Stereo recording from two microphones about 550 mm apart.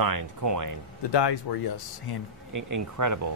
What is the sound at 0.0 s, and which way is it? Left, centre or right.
Speech, right.